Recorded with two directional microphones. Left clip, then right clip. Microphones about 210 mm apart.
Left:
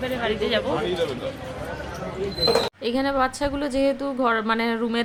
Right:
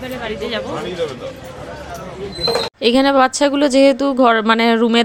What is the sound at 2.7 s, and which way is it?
Speech, 40° right (ahead or behind).